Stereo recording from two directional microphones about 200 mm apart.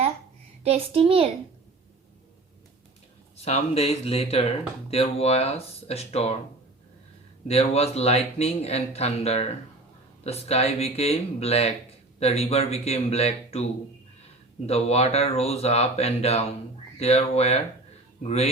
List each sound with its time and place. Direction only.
0.6 s a woman's voice: 30° right (ahead or behind)
3.3 s speech: 30° left (ahead or behind)
7.4 s speech: 30° left (ahead or behind)
14.7 s speech: 30° left (ahead or behind)